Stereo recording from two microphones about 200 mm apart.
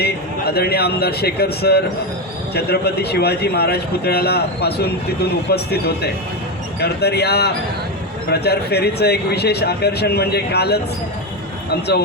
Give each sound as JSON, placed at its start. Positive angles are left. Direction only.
{"t": 0.0, "sound": "speech", "side_deg": 55}